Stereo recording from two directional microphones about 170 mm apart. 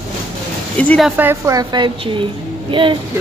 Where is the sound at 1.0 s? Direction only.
10° right (ahead or behind); by 3.0 s 30° right (ahead or behind).